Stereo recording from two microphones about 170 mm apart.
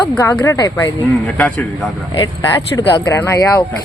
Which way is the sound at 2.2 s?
20° left (ahead or behind).